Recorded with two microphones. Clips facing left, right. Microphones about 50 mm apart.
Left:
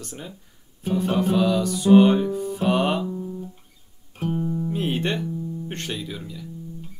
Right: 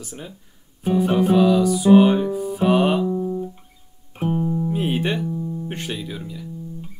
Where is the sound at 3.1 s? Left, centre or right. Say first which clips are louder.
Right 8 dB; right; by 6.4 s centre.